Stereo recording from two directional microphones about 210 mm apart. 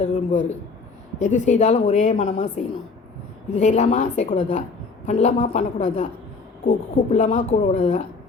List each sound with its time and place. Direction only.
0.0 s a woman's voice: 35° left (ahead or behind)